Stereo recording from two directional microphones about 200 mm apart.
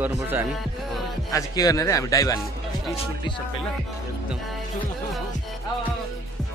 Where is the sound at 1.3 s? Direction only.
15° left (ahead or behind).